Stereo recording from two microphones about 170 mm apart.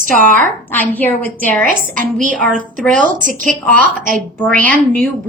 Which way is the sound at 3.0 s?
50° right (ahead or behind).